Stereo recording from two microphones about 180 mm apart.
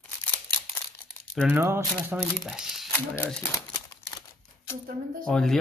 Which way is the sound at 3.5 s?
20° left (ahead or behind).